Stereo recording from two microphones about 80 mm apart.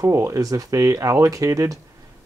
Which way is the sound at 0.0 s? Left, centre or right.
Right.